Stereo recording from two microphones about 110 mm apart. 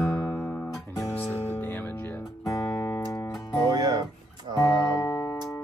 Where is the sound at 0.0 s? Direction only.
30° left (ahead or behind).